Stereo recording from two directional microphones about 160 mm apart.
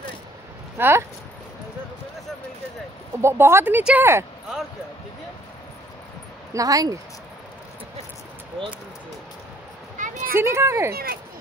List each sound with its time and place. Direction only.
0.7 s speech: 15° right (ahead or behind)
3.2 s speech: 15° right (ahead or behind)
6.5 s speech: 20° right (ahead or behind)
9.9 s a sound: 55° right (ahead or behind)
10.3 s speech: 15° right (ahead or behind)